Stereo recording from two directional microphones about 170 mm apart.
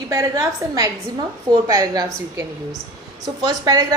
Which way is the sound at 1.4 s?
20° right (ahead or behind).